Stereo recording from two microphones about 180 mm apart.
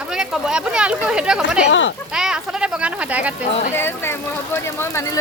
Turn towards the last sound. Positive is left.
turn(degrees=15)  # may be behind; listen again after turning